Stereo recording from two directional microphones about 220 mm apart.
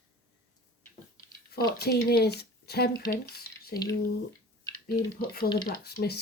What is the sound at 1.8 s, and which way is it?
Speech, 45° left (ahead or behind).